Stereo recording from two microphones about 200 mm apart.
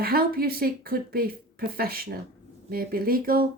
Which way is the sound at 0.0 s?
50° right (ahead or behind).